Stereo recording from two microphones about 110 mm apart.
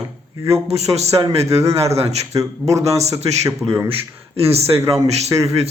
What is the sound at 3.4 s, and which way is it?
Speech, 25° right (ahead or behind).